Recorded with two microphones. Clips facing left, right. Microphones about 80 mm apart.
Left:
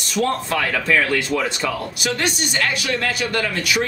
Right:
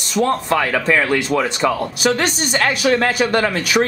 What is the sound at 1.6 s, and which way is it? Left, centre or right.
Speech, right.